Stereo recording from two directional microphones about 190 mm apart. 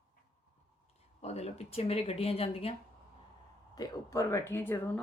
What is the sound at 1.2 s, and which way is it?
Speech, 35° left (ahead or behind).